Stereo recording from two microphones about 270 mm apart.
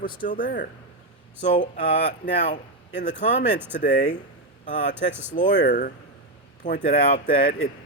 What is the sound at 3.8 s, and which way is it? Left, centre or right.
Speech, left.